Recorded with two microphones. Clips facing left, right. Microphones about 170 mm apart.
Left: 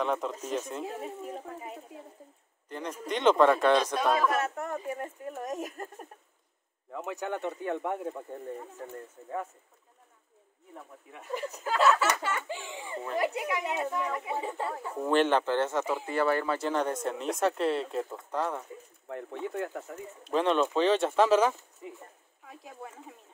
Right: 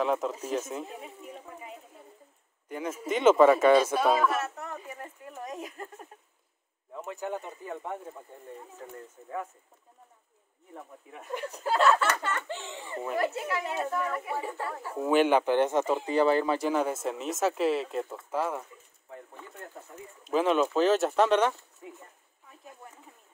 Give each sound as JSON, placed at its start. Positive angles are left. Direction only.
{"t": 0.0, "sound": "speech", "side_deg": 0}
{"t": 2.7, "sound": "speech", "side_deg": -5}
{"t": 4.6, "sound": "a sound", "side_deg": 50}
{"t": 6.9, "sound": "speech", "side_deg": 80}
{"t": 12.0, "sound": "speech", "side_deg": 10}
{"t": 15.0, "sound": "speech", "side_deg": -5}
{"t": 19.0, "sound": "speech", "side_deg": 80}
{"t": 20.2, "sound": "speech", "side_deg": -5}